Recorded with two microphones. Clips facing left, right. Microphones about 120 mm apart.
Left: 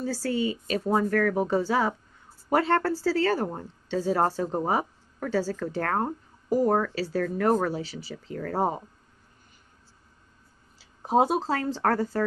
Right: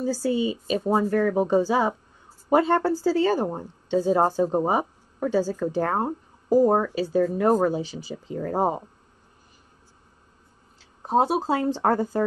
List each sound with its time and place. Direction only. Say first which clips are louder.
0.0 s speech: right 3 dB; 15° right (ahead or behind)
11.1 s speech: right 1 dB; 5° left (ahead or behind)
11.3 s speech: right 4 dB; 15° right (ahead or behind)